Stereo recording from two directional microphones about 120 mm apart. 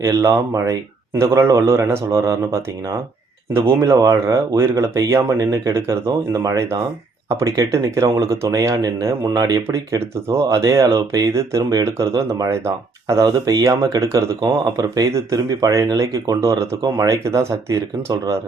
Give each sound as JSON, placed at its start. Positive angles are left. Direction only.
{"t": 0.0, "sound": "speech", "side_deg": -25}
{"t": 3.8, "sound": "speech", "side_deg": -25}